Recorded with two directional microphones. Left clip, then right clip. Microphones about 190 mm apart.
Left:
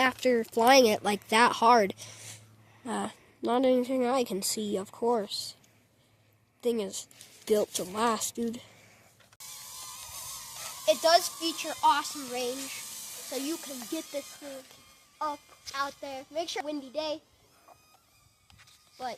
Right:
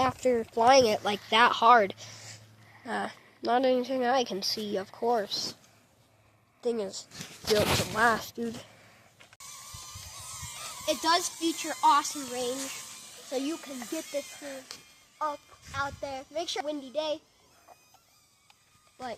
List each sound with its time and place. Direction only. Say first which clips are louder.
0.0 s speech: left 1 dB; 50° left (ahead or behind)
6.6 s speech: left 1 dB; 60° left (ahead or behind)
9.4 s a sound: left 1 dB; 25° left (ahead or behind)
10.7 s a child's voice: left 4 dB; 25° left (ahead or behind)
11.4 s a child's voice: right 1 dB; 10° left (ahead or behind)